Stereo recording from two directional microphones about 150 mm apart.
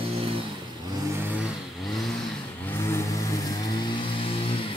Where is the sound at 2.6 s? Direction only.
15° left (ahead or behind).